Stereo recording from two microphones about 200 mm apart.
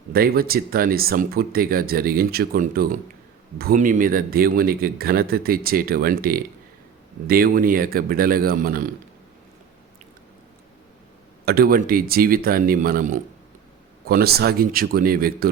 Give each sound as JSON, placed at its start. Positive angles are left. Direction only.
{"t": 0.1, "sound": "speech", "side_deg": -50}
{"t": 11.4, "sound": "speech", "side_deg": -50}